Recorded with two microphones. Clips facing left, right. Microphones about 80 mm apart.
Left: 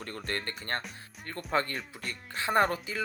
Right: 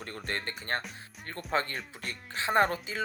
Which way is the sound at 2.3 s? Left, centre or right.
Right.